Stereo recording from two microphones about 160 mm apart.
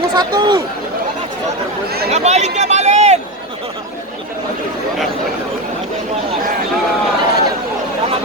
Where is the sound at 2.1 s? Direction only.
45° right (ahead or behind).